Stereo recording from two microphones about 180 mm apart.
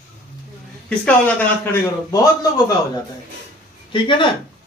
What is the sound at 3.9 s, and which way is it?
Speech, 25° left (ahead or behind).